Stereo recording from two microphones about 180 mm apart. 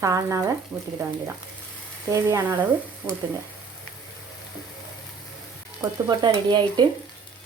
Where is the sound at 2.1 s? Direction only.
15° right (ahead or behind).